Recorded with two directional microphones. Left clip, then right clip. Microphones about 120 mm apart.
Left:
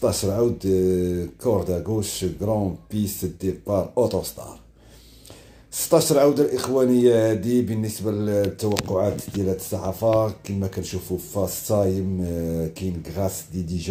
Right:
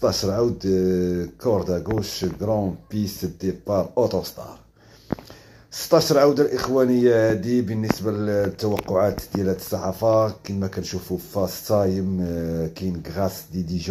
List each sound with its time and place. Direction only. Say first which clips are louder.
0.0 s speech: right 1 dB; 15° left (ahead or behind)
5.9 s speech: right 1 dB; 10° left (ahead or behind)
8.7 s speech: right 3 dB; 10° right (ahead or behind)
9.4 s speech: right 2 dB; 15° left (ahead or behind)